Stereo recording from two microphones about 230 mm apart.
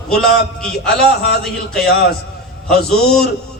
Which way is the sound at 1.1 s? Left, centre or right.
Left.